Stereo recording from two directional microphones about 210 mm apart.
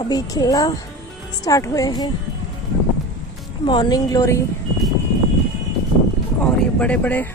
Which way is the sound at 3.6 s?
20° left (ahead or behind).